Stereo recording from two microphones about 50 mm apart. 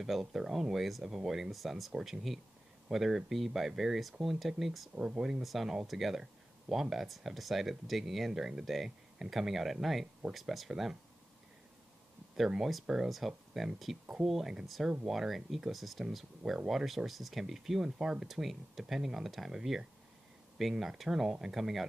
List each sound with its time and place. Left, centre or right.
0.0 s speech: centre
5.4 s speech: centre
10.7 s speech: centre
12.5 s speech: centre
12.8 s speech: centre
18.3 s speech: centre